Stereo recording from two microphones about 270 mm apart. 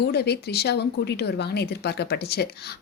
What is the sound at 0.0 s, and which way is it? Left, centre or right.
Speech, left.